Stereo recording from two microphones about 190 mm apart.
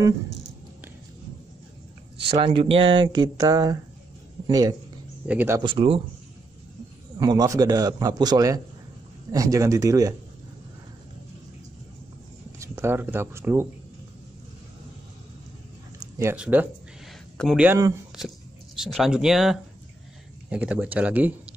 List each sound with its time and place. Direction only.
2.2 s speech: 25° right (ahead or behind); by 5.6 s 10° right (ahead or behind)
5.6 s speech: 25° right (ahead or behind)
7.2 s speech: 20° right (ahead or behind)
12.5 s speech: 15° right (ahead or behind)
16.2 s speech: 10° right (ahead or behind)
17.6 s speech: 15° right (ahead or behind)
18.1 s speech: 5° right (ahead or behind)